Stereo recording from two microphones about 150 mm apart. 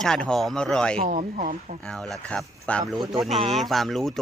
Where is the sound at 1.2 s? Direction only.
60° right (ahead or behind).